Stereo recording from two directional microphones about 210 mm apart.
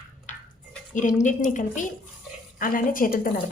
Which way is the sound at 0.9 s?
35° left (ahead or behind).